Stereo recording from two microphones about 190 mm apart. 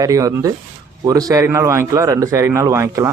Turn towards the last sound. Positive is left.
turn(degrees=-15)  # may be behind; listen again after turning